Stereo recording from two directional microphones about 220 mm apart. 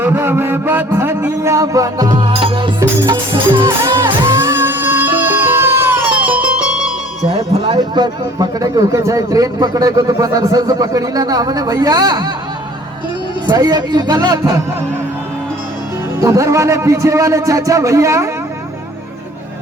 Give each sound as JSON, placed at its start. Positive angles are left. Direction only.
{"t": 0.0, "sound": "a sound", "side_deg": -10}
{"t": 4.0, "sound": "music", "side_deg": -10}
{"t": 7.3, "sound": "a man's voice", "side_deg": -20}
{"t": 13.5, "sound": "speech", "side_deg": -20}
{"t": 16.2, "sound": "a man's voice", "side_deg": -15}